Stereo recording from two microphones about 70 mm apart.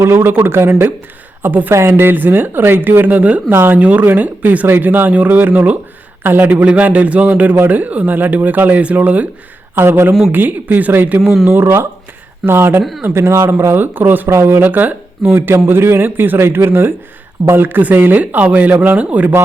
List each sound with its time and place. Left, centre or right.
0.0 s speech: right
1.7 s a man's voice: right
3.5 s speech: right
3.8 s a man's voice: right
9.7 s a man's voice: right
11.4 s speech: right
14.3 s a man's voice: right